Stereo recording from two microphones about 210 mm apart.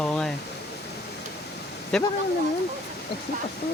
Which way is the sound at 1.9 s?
5° left (ahead or behind).